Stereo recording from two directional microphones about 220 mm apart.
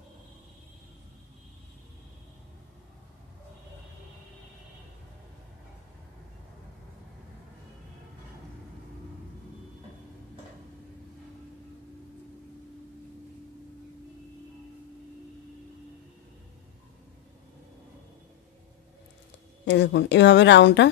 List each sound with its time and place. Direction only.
19.6 s a woman's voice: 50° left (ahead or behind)